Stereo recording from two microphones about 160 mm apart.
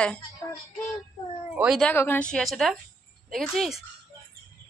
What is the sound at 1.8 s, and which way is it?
A woman's voice, 10° left (ahead or behind).